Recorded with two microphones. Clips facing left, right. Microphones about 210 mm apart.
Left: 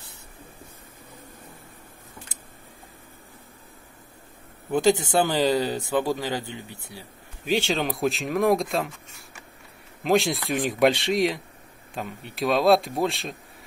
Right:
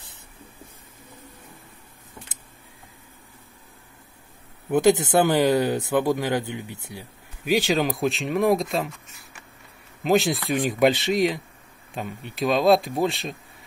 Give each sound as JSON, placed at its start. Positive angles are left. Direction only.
{"t": 4.8, "sound": "speech", "side_deg": -20}
{"t": 5.3, "sound": "speech", "side_deg": -60}
{"t": 5.9, "sound": "a man's voice", "side_deg": -15}
{"t": 6.2, "sound": "speech", "side_deg": -60}
{"t": 6.5, "sound": "speech", "side_deg": -15}
{"t": 7.5, "sound": "speech", "side_deg": -5}